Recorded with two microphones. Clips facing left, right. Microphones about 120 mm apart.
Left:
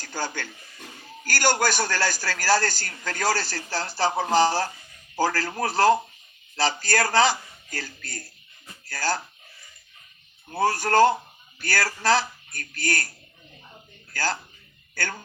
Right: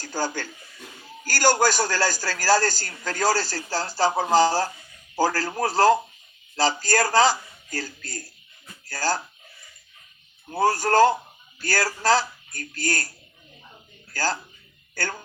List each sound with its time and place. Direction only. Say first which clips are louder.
0.0 s a man's voice: right 3 dB; 45° right (ahead or behind)
10.6 s a man's voice: right 1 dB; 40° right (ahead or behind)
14.1 s speech: right 1 dB; 40° right (ahead or behind)